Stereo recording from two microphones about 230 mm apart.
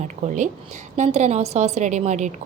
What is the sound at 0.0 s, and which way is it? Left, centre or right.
A woman's voice, right.